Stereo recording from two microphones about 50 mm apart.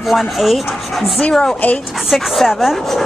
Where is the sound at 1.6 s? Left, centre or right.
Left.